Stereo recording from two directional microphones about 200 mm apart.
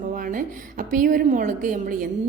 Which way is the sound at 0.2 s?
45° right (ahead or behind).